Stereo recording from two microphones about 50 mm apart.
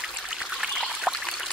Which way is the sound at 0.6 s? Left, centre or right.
Centre.